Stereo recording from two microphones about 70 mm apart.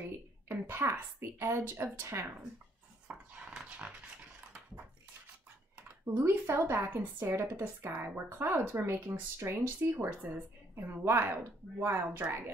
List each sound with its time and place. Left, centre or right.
0.0 s a woman's voice: right
3.1 s dog: centre
5.8 s speech: right
10.2 s speech: right